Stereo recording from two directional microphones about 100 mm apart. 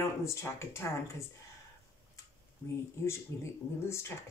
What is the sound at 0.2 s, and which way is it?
Speech, 25° left (ahead or behind).